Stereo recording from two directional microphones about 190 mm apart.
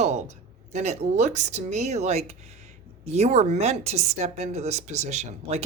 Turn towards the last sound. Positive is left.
turn(degrees=-35)  # may be behind; listen again after turning